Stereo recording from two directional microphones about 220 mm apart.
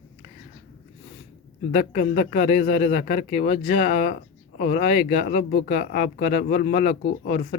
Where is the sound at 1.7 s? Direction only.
35° left (ahead or behind).